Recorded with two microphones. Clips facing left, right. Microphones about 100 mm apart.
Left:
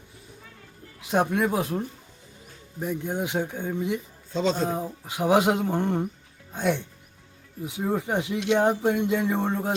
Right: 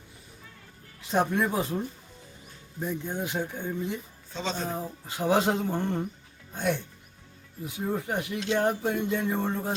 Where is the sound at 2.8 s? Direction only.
15° left (ahead or behind).